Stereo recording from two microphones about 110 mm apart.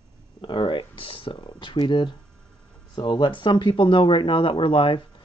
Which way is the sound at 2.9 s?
45° left (ahead or behind).